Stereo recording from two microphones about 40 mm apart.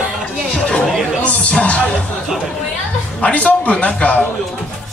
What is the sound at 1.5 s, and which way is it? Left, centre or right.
Music, left.